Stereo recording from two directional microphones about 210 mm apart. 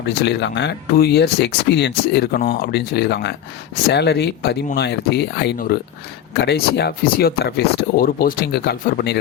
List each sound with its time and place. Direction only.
0.0 s speech: 55° left (ahead or behind)